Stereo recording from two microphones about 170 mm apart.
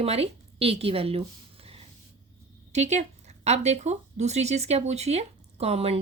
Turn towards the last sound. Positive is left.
turn(degrees=-35)  # may be behind; listen again after turning